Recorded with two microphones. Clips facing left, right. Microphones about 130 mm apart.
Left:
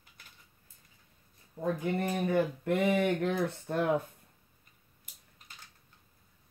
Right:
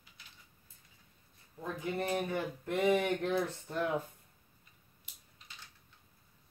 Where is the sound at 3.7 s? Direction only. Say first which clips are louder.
Left 6 dB; 70° left (ahead or behind).